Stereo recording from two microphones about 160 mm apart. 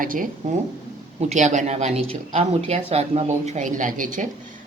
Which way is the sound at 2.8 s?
40° right (ahead or behind).